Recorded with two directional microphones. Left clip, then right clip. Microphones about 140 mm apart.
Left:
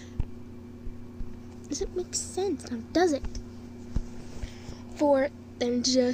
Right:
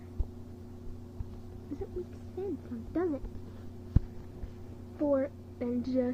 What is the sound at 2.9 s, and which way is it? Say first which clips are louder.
Speech: left 9 dB; 40° left (ahead or behind).